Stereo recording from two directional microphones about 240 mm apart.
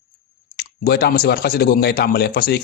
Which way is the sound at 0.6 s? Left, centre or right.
Left.